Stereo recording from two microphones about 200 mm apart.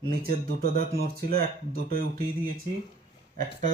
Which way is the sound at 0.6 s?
50° right (ahead or behind).